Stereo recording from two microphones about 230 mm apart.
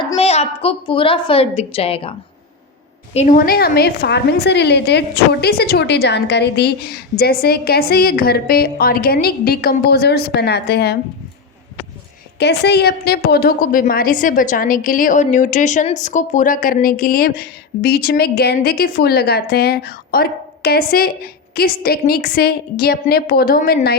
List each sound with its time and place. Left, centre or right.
0.0 s a woman's voice: left
12.4 s a woman's voice: left